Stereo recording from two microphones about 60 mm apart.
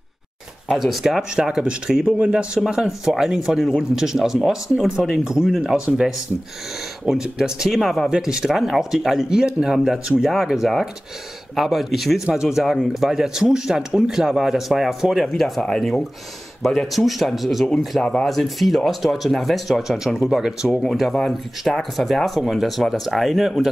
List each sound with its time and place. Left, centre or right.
0.7 s speech: centre
7.1 s speech: centre
8.1 s speech: centre